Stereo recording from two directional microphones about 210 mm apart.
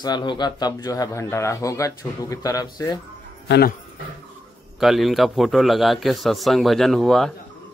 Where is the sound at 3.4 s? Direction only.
50° left (ahead or behind).